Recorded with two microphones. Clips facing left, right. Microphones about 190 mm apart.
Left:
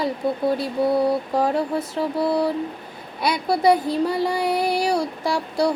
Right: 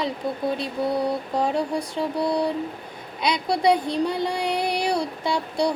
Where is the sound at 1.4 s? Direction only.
5° left (ahead or behind).